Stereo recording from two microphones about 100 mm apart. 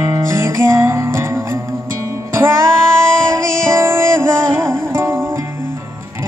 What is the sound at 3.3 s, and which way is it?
Music, 25° right (ahead or behind).